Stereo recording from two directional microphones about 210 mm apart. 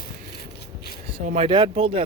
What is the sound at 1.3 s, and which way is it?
Speech, 25° right (ahead or behind).